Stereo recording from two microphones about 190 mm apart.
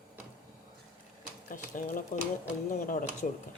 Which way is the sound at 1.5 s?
45° left (ahead or behind).